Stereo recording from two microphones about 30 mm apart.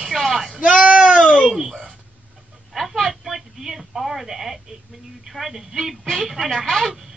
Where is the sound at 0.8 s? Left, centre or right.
Right.